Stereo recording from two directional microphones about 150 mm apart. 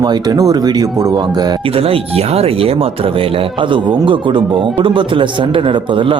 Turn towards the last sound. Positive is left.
turn(degrees=-35)  # may be behind; listen again after turning